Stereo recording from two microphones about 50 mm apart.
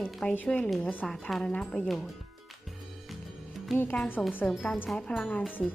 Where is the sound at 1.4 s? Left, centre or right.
Centre.